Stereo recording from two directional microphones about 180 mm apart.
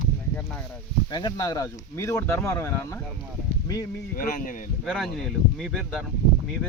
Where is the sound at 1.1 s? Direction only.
25° left (ahead or behind).